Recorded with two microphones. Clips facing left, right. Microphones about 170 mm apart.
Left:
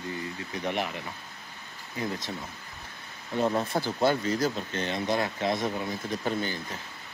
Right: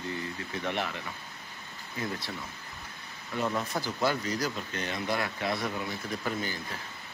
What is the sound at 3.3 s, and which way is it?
Speech, 30° left (ahead or behind).